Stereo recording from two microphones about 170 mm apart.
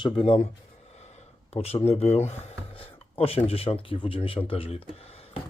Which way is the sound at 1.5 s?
35° left (ahead or behind).